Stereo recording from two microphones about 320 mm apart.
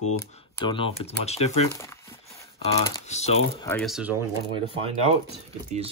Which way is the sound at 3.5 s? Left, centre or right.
Centre.